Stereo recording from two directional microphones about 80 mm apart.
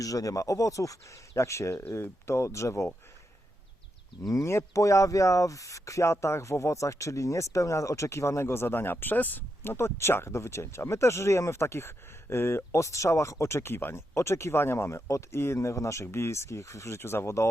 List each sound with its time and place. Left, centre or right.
0.0 s speech: left
4.3 s speech: left